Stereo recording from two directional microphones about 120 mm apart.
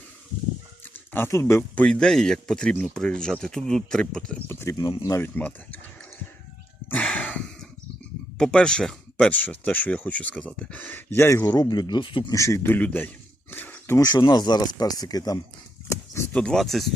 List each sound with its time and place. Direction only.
0.9 s speech: 20° left (ahead or behind)
1.7 s speech: 10° left (ahead or behind)
4.4 s speech: 25° left (ahead or behind)
5.3 s speech: 15° left (ahead or behind)
6.9 s a sound: 10° left (ahead or behind)
8.4 s speech: 5° left (ahead or behind)
11.7 s speech: 35° left (ahead or behind)
12.3 s speech: 25° left (ahead or behind)
13.5 s a sound: 15° left (ahead or behind)
14.2 s speech: 35° left (ahead or behind)
16.3 s speech: 5° left (ahead or behind)